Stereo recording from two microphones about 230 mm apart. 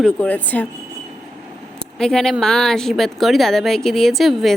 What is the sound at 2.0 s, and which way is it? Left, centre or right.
A woman's voice, centre.